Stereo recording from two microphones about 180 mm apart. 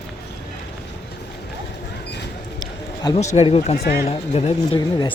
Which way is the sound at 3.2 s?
40° left (ahead or behind).